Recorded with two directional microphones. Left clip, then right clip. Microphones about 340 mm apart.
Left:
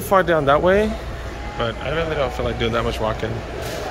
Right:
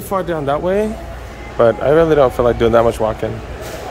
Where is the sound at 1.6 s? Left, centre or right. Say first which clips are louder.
Right 12 dB; centre.